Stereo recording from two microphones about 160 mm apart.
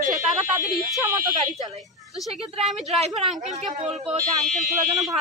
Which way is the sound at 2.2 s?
Centre (ahead or behind).